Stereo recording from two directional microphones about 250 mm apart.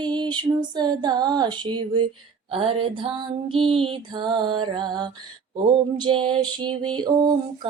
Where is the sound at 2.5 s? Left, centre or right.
Right.